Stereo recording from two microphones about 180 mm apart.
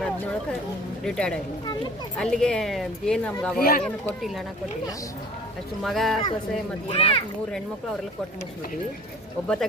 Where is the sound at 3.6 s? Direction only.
55° left (ahead or behind).